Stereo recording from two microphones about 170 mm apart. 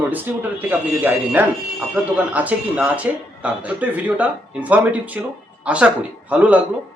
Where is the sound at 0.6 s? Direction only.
10° right (ahead or behind).